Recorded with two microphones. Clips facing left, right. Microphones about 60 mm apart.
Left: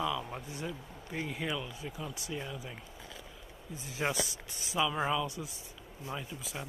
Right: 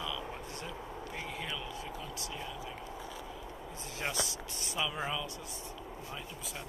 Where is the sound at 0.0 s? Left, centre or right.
Centre.